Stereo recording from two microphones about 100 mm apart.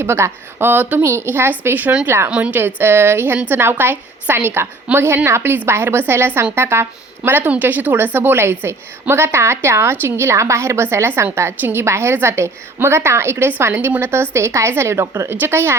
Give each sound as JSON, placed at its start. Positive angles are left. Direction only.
{"t": 0.0, "sound": "a woman's voice", "side_deg": -25}